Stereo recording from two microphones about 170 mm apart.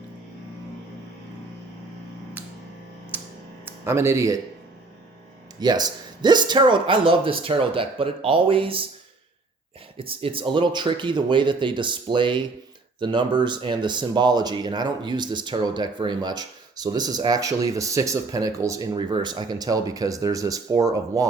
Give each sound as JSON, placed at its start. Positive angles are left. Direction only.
{"t": 3.1, "sound": "music", "side_deg": -10}
{"t": 3.7, "sound": "speech", "side_deg": -15}
{"t": 5.5, "sound": "speech", "side_deg": -25}
{"t": 10.0, "sound": "speech", "side_deg": -35}